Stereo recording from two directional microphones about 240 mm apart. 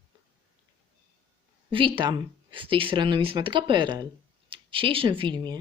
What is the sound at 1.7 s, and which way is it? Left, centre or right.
Speech, right.